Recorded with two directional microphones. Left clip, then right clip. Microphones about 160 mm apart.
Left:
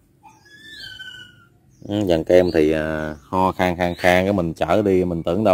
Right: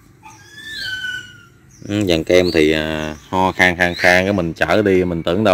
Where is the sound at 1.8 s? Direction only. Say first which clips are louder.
Right 3 dB; 5° right (ahead or behind).